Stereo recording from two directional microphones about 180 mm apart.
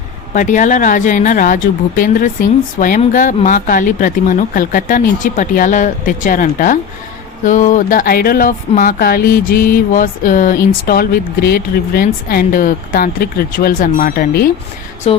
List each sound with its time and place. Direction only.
0.3 s a woman's voice: 45° left (ahead or behind)
15.1 s speech: 35° left (ahead or behind)